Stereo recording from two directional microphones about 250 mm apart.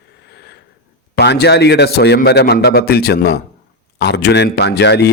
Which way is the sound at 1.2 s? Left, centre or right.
Left.